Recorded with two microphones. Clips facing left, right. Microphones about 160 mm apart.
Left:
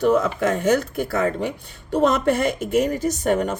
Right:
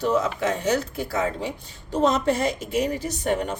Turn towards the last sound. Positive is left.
turn(degrees=45)  # may be behind; listen again after turning